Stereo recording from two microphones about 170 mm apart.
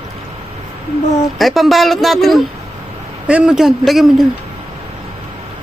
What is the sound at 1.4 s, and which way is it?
Speech, centre (ahead or behind).